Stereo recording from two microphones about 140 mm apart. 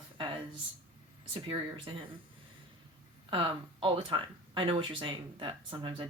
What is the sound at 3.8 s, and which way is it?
Speech, 35° right (ahead or behind).